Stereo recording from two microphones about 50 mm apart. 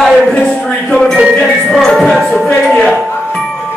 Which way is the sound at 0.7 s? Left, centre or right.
Left.